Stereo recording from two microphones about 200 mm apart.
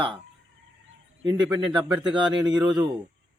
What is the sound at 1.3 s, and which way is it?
Speech, 20° right (ahead or behind).